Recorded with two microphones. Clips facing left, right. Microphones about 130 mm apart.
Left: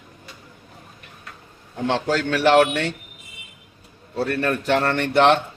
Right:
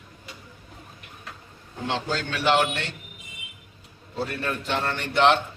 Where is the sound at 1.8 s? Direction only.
65° left (ahead or behind).